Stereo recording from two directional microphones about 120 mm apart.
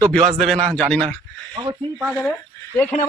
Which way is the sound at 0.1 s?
5° left (ahead or behind).